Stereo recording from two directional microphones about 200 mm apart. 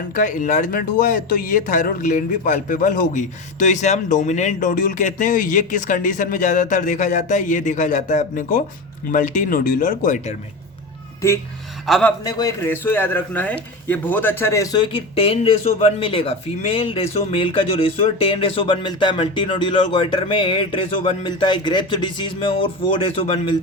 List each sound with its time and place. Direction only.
0.1 s speech: 40° left (ahead or behind)
11.9 s a man's voice: centre (ahead or behind)
12.2 s speech: 15° left (ahead or behind)